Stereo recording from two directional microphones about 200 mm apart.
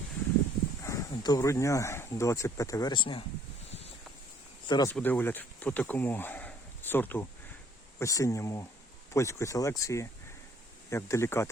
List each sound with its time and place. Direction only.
0.9 s speech: 20° left (ahead or behind)
4.6 s speech: 20° left (ahead or behind)
4.9 s speech: 10° left (ahead or behind)